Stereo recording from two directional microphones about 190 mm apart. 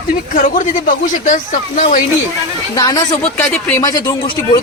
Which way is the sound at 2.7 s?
20° left (ahead or behind).